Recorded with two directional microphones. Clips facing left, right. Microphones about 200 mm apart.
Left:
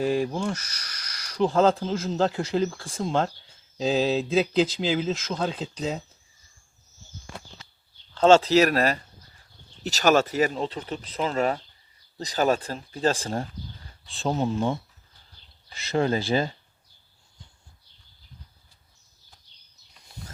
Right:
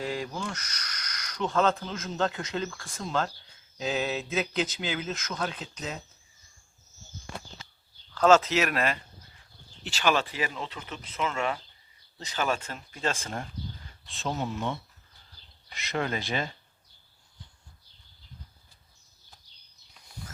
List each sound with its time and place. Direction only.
0.0 s speech: 30° left (ahead or behind)
8.1 s speech: 30° left (ahead or behind)
15.4 s a sound: 35° right (ahead or behind)
15.7 s speech: 30° left (ahead or behind)